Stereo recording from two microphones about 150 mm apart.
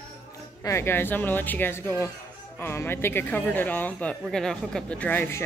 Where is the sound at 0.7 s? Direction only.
15° left (ahead or behind).